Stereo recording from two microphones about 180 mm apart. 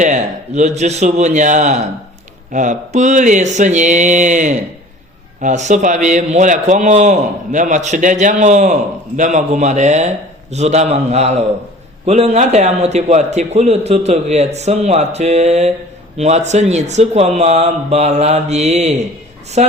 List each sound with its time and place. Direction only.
0.0 s a man's voice: 40° right (ahead or behind)
2.5 s mantra: 45° right (ahead or behind)
5.4 s a man's voice: 40° right (ahead or behind)